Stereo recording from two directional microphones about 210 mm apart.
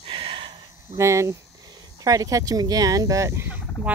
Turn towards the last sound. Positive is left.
turn(degrees=-10)  # may be behind; listen again after turning